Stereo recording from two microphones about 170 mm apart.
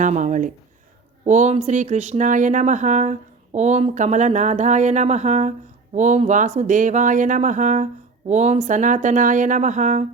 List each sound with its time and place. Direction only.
0.0 s speech: 45° right (ahead or behind)